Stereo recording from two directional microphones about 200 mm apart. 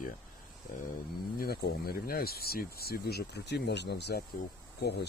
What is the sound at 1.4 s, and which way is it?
Speech, 50° left (ahead or behind).